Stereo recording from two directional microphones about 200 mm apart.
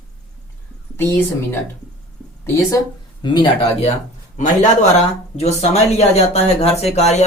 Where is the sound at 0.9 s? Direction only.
10° left (ahead or behind).